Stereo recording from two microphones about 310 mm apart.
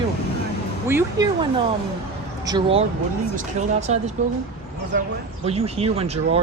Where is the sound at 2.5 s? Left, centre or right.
Centre.